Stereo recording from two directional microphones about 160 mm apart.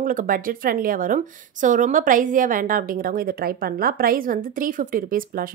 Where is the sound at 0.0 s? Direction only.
60° right (ahead or behind).